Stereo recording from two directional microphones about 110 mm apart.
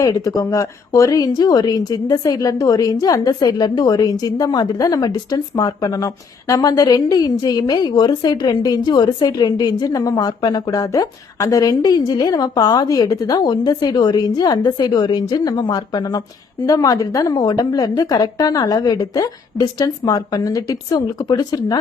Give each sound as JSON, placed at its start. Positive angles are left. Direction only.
{"t": 0.0, "sound": "speech", "side_deg": 35}